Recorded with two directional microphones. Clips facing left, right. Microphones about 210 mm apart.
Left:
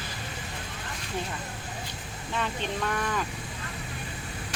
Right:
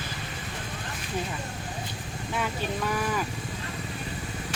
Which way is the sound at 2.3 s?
5° right (ahead or behind).